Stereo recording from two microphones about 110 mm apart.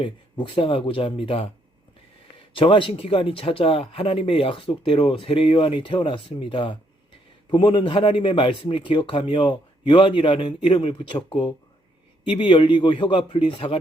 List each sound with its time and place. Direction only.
0.4 s speech: 50° left (ahead or behind)
2.6 s speech: 50° left (ahead or behind)